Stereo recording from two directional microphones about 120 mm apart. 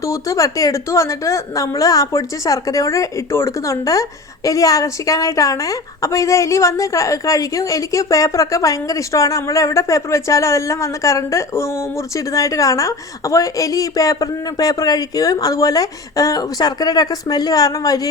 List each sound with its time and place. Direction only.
0.0 s a woman's voice: 25° left (ahead or behind)